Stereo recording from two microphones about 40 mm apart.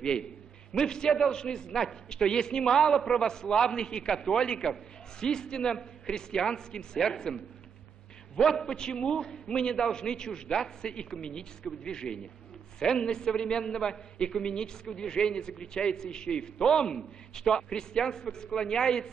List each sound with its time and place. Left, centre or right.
0.0 s a man's voice: left
8.4 s a man's voice: centre